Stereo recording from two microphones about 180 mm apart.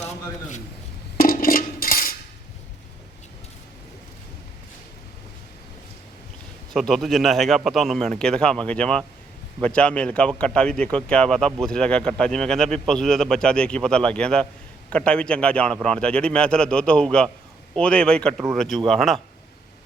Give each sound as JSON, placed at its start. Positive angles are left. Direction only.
{"t": 0.0, "sound": "a sound", "side_deg": 40}
{"t": 1.1, "sound": "cutlery", "side_deg": 55}
{"t": 6.7, "sound": "speech", "side_deg": 0}